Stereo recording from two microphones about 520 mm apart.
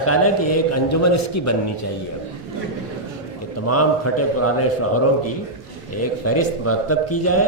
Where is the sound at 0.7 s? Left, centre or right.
Left.